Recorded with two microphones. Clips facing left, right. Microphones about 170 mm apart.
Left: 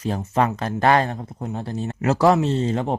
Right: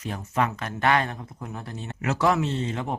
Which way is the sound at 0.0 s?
30° left (ahead or behind).